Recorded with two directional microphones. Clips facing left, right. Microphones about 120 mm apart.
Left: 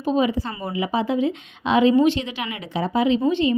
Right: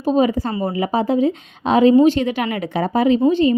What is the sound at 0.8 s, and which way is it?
A woman's voice, 40° right (ahead or behind).